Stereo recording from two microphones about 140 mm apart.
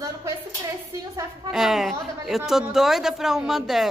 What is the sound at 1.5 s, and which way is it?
A woman's voice, centre (ahead or behind).